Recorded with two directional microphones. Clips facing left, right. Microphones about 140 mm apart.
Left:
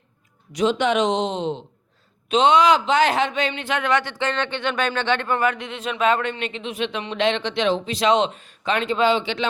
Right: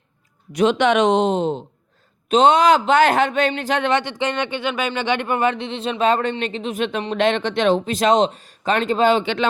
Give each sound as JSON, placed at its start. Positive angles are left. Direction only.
{"t": 0.5, "sound": "a man's voice", "side_deg": -65}
{"t": 3.8, "sound": "speech", "side_deg": -20}